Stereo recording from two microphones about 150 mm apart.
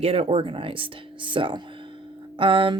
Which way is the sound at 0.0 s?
40° right (ahead or behind).